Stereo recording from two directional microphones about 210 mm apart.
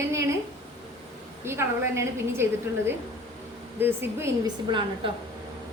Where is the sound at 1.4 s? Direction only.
10° right (ahead or behind).